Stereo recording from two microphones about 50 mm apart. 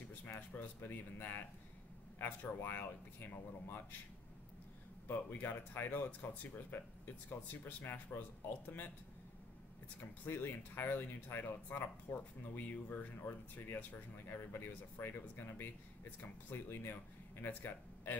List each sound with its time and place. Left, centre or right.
0.4 s a sound: left
0.7 s speech: left
5.0 s speech: left
10.2 s speech: left